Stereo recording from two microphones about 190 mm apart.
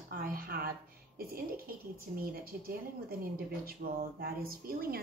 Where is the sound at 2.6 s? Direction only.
50° right (ahead or behind).